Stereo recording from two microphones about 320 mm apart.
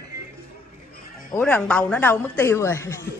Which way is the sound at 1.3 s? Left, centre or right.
Centre.